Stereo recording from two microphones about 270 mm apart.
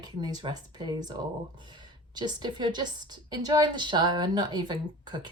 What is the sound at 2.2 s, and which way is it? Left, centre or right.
A woman's voice, centre.